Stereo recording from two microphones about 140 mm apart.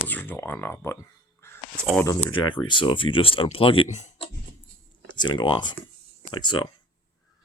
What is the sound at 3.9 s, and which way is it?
Speech, 55° left (ahead or behind).